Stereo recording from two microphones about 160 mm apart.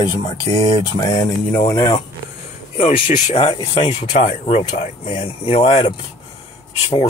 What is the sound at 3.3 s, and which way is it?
Speech, 35° left (ahead or behind).